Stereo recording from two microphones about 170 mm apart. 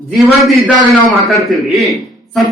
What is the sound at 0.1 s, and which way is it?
A man's voice, centre (ahead or behind).